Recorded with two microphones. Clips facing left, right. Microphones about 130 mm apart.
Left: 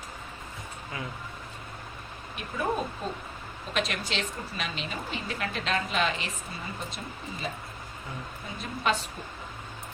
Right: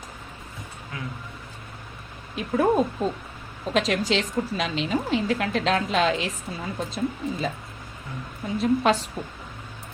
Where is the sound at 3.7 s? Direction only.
90° right.